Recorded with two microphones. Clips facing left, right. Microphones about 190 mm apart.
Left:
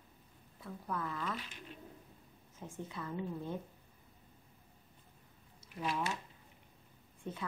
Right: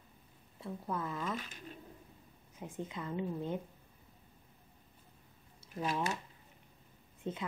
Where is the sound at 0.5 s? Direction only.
25° right (ahead or behind).